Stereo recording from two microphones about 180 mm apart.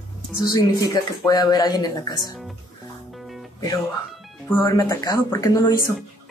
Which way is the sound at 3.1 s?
Centre (ahead or behind).